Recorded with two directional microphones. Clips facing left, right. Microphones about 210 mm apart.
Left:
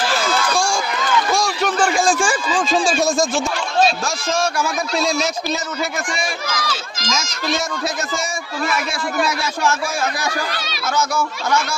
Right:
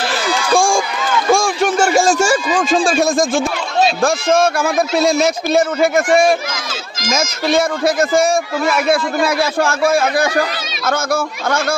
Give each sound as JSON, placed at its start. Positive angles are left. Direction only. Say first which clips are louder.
{"t": 0.5, "sound": "run", "louder": "right 7 dB", "side_deg": -50}
{"t": 1.3, "sound": "a sound", "louder": "right 5 dB", "side_deg": -50}
{"t": 2.6, "sound": "a man's voice", "louder": "right 1 dB", "side_deg": -55}
{"t": 6.5, "sound": "speech", "louder": "left 2 dB", "side_deg": -25}
{"t": 7.1, "sound": "a man's voice", "louder": "right 7 dB", "side_deg": -55}